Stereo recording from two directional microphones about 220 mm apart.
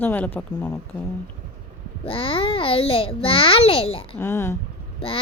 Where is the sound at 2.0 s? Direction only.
25° left (ahead or behind).